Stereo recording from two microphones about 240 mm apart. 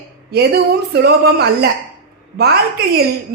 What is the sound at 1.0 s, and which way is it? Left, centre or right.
Speech, right.